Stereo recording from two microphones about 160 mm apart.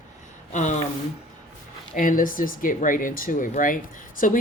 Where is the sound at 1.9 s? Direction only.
60° left (ahead or behind).